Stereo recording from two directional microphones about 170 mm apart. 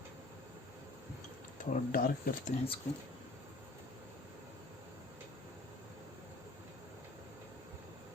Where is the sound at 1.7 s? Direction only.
55° left (ahead or behind).